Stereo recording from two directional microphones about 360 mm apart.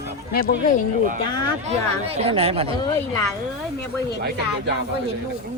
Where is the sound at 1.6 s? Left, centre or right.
Centre.